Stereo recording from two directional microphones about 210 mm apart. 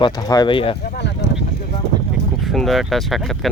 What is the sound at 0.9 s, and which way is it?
Speech, 55° left (ahead or behind).